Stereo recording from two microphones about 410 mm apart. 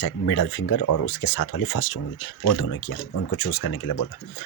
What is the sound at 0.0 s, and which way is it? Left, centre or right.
Speech, left.